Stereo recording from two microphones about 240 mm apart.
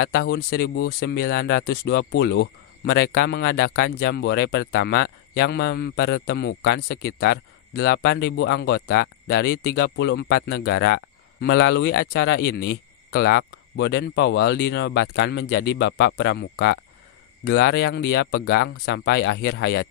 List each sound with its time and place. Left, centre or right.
0.0 s speech: left